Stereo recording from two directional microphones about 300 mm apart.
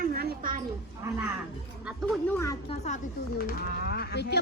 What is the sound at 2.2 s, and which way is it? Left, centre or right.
Speech, centre.